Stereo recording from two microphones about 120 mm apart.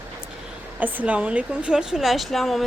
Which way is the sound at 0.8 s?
10° right (ahead or behind).